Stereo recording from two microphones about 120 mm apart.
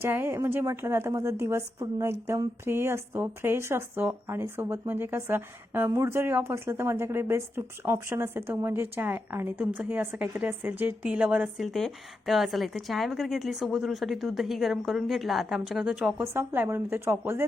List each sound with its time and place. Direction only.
0.0 s a woman's voice: 20° right (ahead or behind)
16.2 s a woman's voice: 20° right (ahead or behind)